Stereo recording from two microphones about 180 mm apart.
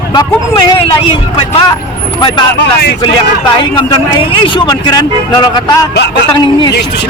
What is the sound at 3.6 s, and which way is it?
A man's voice, 25° left (ahead or behind).